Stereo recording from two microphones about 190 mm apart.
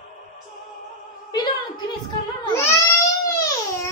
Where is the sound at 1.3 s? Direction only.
20° left (ahead or behind).